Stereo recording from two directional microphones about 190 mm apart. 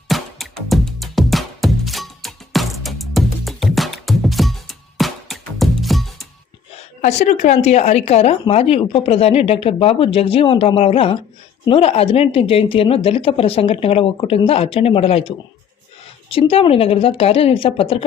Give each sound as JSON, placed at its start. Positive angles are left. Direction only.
{"t": 0.1, "sound": "music", "side_deg": 0}
{"t": 7.0, "sound": "speech", "side_deg": 40}
{"t": 16.3, "sound": "speech", "side_deg": 30}